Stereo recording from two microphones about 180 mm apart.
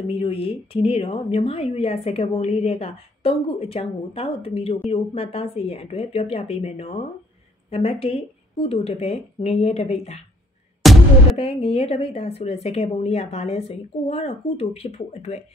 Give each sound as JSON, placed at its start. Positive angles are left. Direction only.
{"t": 0.0, "sound": "speech", "side_deg": 30}
{"t": 10.8, "sound": "music", "side_deg": 0}
{"t": 11.3, "sound": "speech", "side_deg": 35}